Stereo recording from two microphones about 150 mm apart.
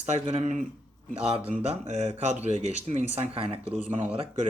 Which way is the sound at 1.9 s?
45° right (ahead or behind).